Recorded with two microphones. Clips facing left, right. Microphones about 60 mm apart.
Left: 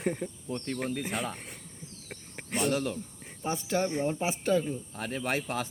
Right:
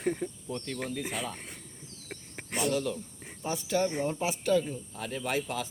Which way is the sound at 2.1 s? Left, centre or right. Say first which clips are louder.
Left 1 dB; centre.